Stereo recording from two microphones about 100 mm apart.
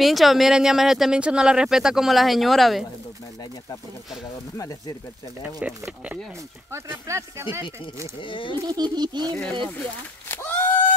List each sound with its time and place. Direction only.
0.0 s speech: centre (ahead or behind)
4.6 s speech: 35° left (ahead or behind)
5.4 s speech: 10° right (ahead or behind)
6.7 s speech: 30° right (ahead or behind)
8.2 s speech: 55° left (ahead or behind)
8.6 s speech: 45° right (ahead or behind)
9.3 s speech: 10° left (ahead or behind)
10.2 s a sound: 20° left (ahead or behind)